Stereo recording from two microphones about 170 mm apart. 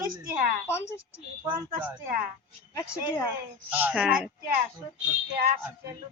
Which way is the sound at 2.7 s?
20° left (ahead or behind).